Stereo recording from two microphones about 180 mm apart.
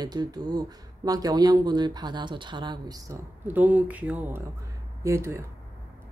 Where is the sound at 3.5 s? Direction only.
10° right (ahead or behind).